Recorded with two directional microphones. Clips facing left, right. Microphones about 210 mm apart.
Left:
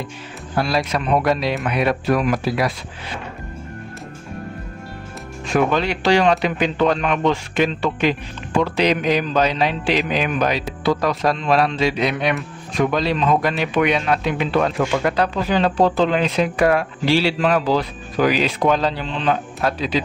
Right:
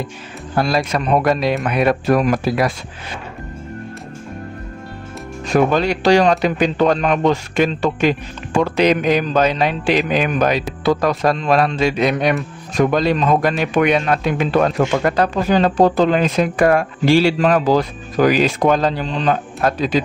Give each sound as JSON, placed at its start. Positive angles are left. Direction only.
{"t": 0.6, "sound": "speech", "side_deg": -45}
{"t": 5.5, "sound": "speech", "side_deg": -40}